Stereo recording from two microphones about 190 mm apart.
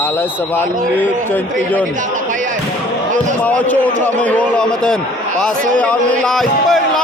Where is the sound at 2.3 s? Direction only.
40° right (ahead or behind).